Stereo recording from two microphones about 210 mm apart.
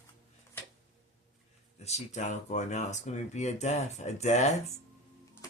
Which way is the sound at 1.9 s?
35° left (ahead or behind).